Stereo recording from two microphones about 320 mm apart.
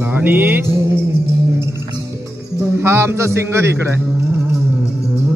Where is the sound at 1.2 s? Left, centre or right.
Centre.